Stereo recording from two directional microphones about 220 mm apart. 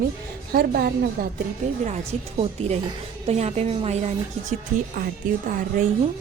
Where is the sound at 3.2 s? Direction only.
30° right (ahead or behind).